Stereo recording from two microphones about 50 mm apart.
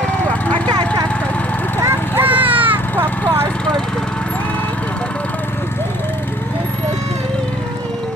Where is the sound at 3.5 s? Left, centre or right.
Centre.